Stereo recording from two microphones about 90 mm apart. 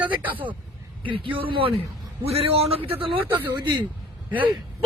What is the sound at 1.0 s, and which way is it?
Speech, 75° right (ahead or behind).